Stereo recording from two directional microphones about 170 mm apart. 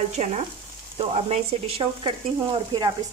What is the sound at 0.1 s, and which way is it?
Frying, 45° right (ahead or behind).